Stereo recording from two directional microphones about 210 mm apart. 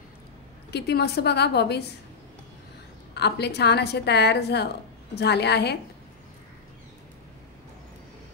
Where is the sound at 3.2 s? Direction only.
55° left (ahead or behind).